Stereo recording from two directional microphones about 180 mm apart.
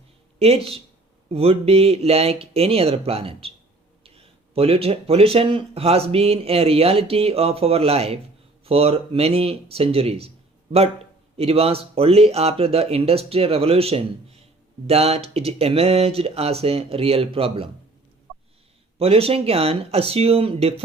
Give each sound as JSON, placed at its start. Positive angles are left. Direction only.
{"t": 0.3, "sound": "speech", "side_deg": -35}
{"t": 18.9, "sound": "speech", "side_deg": -35}